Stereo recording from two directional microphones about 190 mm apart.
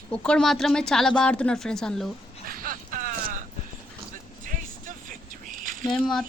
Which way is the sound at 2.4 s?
50° right (ahead or behind).